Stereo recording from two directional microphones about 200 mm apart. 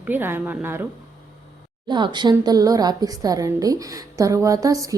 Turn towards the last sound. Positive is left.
turn(degrees=-15)  # may be behind; listen again after turning